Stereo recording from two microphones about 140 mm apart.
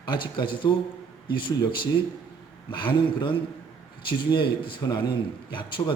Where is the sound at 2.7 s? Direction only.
35° left (ahead or behind).